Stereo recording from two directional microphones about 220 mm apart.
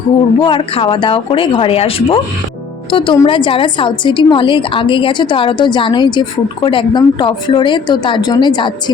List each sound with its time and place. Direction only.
0.4 s a woman's voice: 25° left (ahead or behind)